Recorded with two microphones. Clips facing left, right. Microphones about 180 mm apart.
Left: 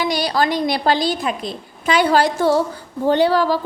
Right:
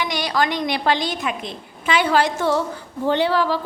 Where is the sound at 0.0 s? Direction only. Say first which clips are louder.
Left 3 dB; 35° left (ahead or behind).